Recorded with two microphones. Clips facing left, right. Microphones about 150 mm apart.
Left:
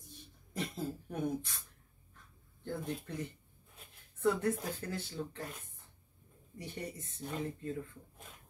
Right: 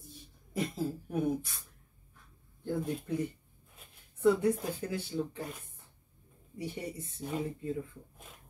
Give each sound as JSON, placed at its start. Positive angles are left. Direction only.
{"t": 0.0, "sound": "a sound", "side_deg": -5}
{"t": 2.6, "sound": "speech", "side_deg": -10}
{"t": 6.6, "sound": "speech", "side_deg": -10}